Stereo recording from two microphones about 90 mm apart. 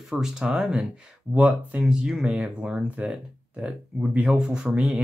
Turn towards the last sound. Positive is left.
turn(degrees=-15)  # may be behind; listen again after turning